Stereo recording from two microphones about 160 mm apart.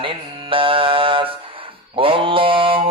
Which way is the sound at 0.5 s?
35° right (ahead or behind).